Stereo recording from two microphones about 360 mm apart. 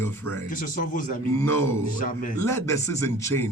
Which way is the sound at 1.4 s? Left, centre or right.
Centre.